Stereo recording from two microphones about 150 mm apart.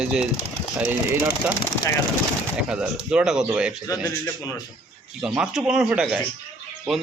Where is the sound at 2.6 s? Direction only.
5° right (ahead or behind).